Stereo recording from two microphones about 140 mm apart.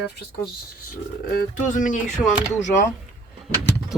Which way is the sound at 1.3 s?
80° left.